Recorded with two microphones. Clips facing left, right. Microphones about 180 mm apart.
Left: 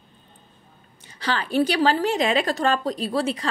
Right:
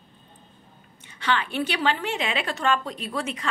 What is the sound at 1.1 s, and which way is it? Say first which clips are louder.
A woman's voice: even; 35° left (ahead or behind).